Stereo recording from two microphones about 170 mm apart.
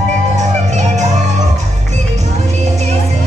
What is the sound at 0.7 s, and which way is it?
Music, 45° right (ahead or behind).